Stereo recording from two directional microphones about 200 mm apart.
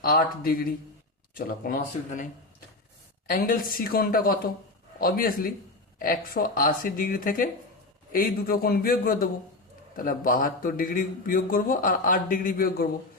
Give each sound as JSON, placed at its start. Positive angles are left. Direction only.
{"t": 0.0, "sound": "a man's voice", "side_deg": 45}
{"t": 3.2, "sound": "a man's voice", "side_deg": 45}